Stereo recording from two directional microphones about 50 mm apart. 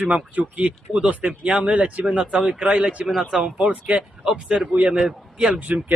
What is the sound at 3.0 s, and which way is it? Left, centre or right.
Speech, centre.